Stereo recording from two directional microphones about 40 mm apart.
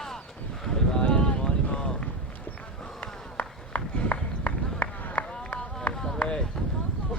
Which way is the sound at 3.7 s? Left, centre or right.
Left.